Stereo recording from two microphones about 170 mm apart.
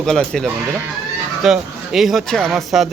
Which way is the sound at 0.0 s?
5° left (ahead or behind).